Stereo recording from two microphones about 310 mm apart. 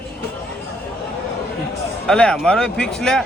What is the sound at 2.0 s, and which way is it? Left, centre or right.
Speech, centre.